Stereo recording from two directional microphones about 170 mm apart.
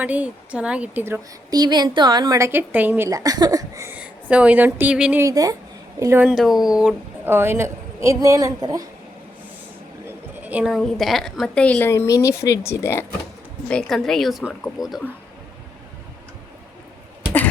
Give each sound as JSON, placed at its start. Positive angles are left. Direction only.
{"t": 0.0, "sound": "a woman's voice", "side_deg": -10}
{"t": 5.2, "sound": "a woman's voice", "side_deg": -20}
{"t": 10.1, "sound": "a woman's voice", "side_deg": -10}
{"t": 13.7, "sound": "a woman's voice", "side_deg": 5}